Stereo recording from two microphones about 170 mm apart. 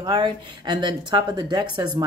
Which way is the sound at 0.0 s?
25° right (ahead or behind).